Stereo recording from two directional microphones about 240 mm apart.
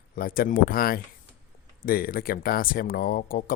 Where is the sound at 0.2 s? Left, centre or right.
Left.